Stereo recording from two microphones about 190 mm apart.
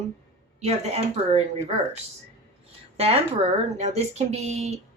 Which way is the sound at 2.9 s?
30° right (ahead or behind).